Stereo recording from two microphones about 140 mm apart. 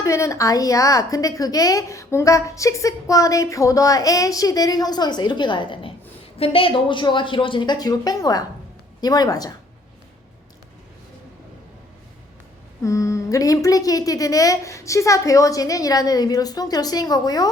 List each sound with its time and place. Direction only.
0.0 s a woman's voice: 20° left (ahead or behind)
12.8 s a woman's voice: 20° left (ahead or behind)